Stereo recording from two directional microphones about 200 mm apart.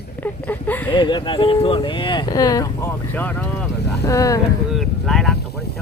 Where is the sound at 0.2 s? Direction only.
10° left (ahead or behind).